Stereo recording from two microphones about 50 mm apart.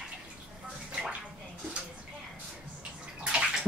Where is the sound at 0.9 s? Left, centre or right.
Centre.